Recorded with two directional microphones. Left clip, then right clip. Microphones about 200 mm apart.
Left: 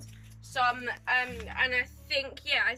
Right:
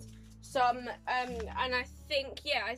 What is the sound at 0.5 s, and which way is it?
A woman's voice, 30° right (ahead or behind).